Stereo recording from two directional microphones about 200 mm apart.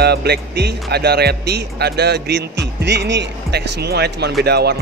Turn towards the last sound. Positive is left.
turn(degrees=-55)  # may be behind; listen again after turning